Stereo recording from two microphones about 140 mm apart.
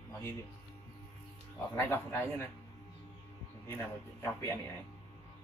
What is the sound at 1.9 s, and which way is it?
Speech, 15° left (ahead or behind).